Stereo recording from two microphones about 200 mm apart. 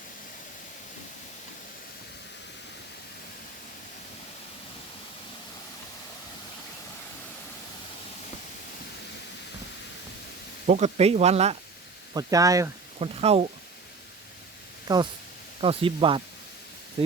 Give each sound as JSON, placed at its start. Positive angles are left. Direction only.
{"t": 10.7, "sound": "speech", "side_deg": -35}
{"t": 12.1, "sound": "speech", "side_deg": -15}
{"t": 13.0, "sound": "speech", "side_deg": -30}
{"t": 14.9, "sound": "speech", "side_deg": -20}